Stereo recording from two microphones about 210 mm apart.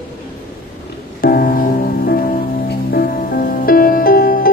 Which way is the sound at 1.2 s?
45° left (ahead or behind).